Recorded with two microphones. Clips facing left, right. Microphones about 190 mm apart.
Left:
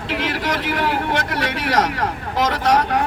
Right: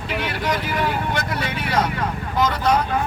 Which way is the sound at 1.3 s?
90° left.